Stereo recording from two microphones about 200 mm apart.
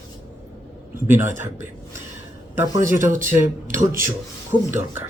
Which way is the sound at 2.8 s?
40° right (ahead or behind).